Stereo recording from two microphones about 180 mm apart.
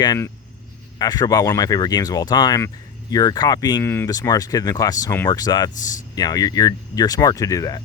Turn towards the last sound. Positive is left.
turn(degrees=20)  # may be behind; listen again after turning